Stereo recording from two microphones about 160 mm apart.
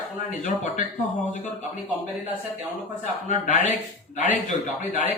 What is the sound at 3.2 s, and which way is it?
Speech, 50° left (ahead or behind).